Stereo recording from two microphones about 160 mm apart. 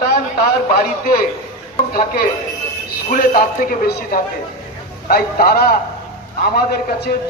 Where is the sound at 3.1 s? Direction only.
60° left (ahead or behind).